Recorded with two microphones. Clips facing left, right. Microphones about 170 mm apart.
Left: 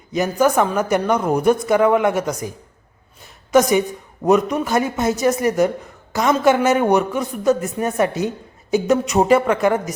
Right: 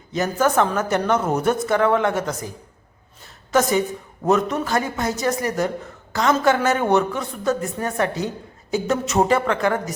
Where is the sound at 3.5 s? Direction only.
15° left (ahead or behind).